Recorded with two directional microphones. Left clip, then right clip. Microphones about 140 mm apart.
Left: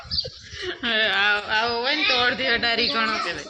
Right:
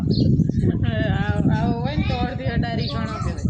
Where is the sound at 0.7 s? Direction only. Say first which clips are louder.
Left 4 dB; 45° right (ahead or behind).